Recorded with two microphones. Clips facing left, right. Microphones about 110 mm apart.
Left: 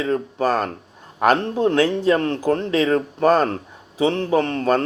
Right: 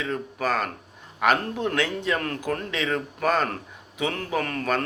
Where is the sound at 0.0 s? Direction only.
35° left (ahead or behind).